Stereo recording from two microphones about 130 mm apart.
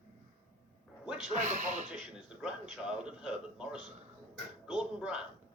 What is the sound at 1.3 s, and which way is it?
Speech, 65° right (ahead or behind).